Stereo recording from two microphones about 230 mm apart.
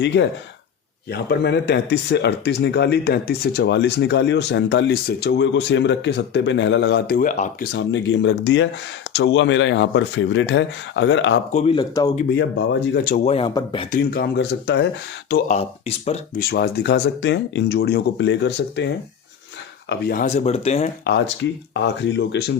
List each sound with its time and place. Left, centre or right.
0.0 s speech: left
7.7 s speech: left
11.5 s speech: left
12.3 s speech: left
13.1 s speech: left
13.9 s speech: left
15.4 s speech: left
16.5 s speech: left
19.9 s speech: left
21.7 s speech: left